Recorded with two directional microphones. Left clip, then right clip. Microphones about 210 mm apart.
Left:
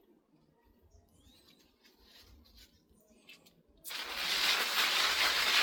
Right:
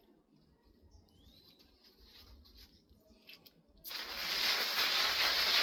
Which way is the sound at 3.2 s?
20° right (ahead or behind).